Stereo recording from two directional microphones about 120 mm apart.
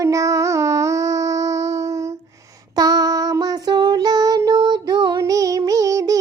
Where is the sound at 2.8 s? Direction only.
30° right (ahead or behind).